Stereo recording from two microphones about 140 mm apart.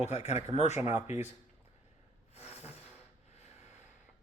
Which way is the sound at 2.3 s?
45° left (ahead or behind).